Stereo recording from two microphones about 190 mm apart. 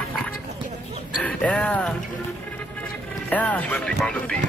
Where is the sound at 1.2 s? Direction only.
5° left (ahead or behind).